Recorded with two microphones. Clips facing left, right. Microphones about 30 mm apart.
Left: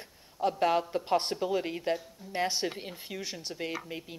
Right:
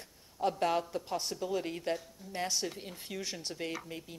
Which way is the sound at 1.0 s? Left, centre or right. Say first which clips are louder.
Left 7 dB; left.